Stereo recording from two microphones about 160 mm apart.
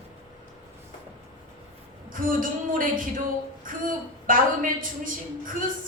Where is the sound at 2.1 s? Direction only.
55° right (ahead or behind).